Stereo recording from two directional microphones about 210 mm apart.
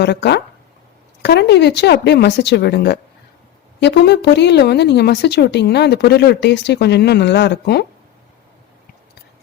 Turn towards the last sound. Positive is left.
turn(degrees=55)  # may be behind; listen again after turning